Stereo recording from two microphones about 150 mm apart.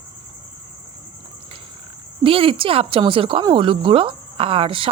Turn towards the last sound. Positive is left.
turn(degrees=-35)  # may be behind; listen again after turning